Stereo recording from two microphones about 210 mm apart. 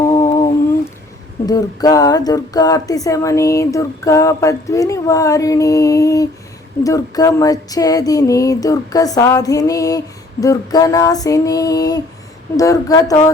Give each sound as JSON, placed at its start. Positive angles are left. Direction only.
{"t": 0.0, "sound": "humming", "side_deg": 15}
{"t": 1.5, "sound": "speech", "side_deg": 20}